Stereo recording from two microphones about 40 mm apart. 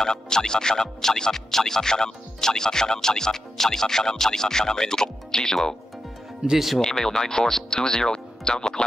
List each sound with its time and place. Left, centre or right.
0.0 s speech: centre
6.4 s speech: centre
6.8 s speech: centre